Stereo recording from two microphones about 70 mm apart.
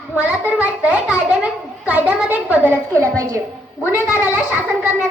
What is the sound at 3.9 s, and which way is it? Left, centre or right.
Cat, left.